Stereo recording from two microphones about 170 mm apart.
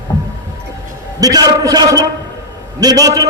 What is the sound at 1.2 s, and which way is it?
A man's voice, 20° right (ahead or behind).